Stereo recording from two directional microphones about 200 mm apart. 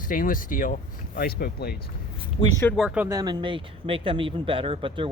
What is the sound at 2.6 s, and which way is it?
Speech, centre (ahead or behind).